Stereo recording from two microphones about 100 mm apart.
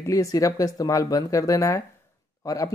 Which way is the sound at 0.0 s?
30° left (ahead or behind).